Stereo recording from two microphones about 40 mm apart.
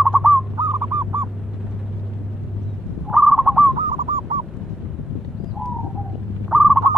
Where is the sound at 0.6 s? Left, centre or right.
Right.